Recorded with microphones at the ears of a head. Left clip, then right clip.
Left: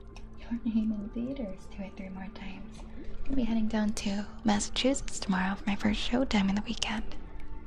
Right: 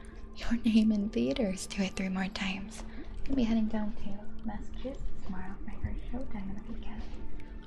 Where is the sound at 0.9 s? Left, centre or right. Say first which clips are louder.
Right 6 dB; right.